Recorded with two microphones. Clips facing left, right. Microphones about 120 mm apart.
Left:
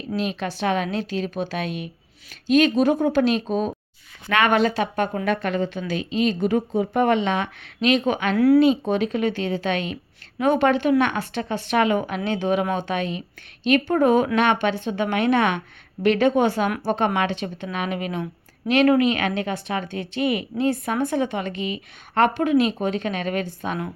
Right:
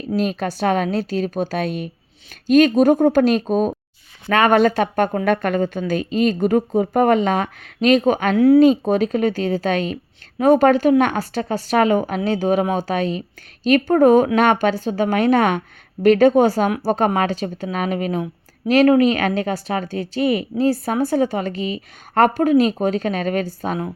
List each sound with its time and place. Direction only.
0.2 s speech: 45° right (ahead or behind)
8.4 s speech: 25° right (ahead or behind)
8.6 s speech: 40° right (ahead or behind)